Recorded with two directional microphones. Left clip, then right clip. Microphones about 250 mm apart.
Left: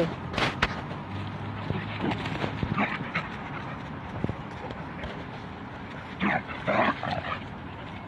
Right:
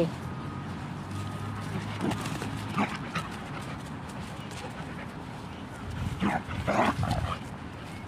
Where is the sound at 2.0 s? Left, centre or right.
Centre.